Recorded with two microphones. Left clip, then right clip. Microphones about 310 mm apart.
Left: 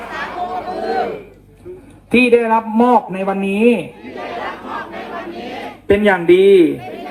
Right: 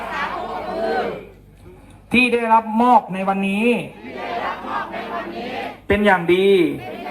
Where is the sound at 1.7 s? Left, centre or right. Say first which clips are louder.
Left 12 dB; centre.